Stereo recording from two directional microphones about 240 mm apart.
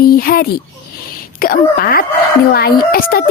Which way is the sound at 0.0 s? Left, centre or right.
Left.